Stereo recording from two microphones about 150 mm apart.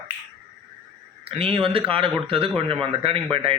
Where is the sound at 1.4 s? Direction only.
35° right (ahead or behind).